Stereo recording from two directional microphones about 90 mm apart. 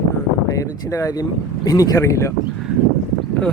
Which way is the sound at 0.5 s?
40° left (ahead or behind).